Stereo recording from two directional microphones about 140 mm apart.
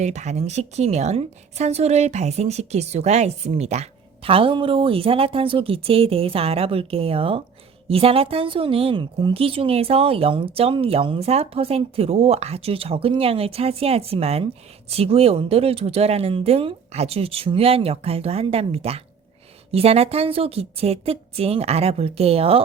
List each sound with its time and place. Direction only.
0.0 s a woman's voice: 55° right (ahead or behind)